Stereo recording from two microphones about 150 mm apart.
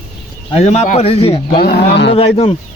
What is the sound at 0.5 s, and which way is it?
Speech, 45° left (ahead or behind).